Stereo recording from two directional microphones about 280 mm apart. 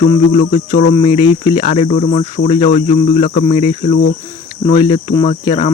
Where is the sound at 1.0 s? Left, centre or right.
Centre.